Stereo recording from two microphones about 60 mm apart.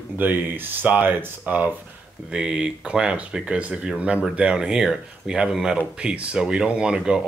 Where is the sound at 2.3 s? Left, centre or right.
Centre.